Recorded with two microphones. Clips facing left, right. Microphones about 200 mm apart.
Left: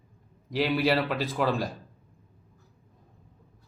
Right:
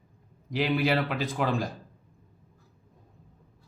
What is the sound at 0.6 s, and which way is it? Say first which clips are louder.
Speech: left 1 dB; 35° left (ahead or behind).